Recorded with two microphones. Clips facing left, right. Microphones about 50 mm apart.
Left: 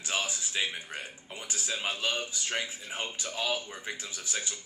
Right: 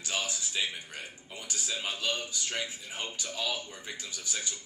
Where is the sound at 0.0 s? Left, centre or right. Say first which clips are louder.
Left 2 dB; left.